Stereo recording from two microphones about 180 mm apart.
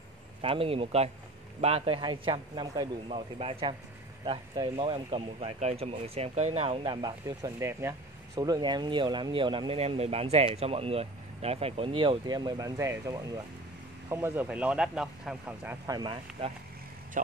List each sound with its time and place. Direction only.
0.4 s speech: 30° right (ahead or behind); by 15.8 s 10° right (ahead or behind)
15.9 s speech: 25° right (ahead or behind)